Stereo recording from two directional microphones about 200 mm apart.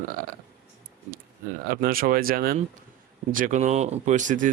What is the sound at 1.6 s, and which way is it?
Speech, 45° right (ahead or behind).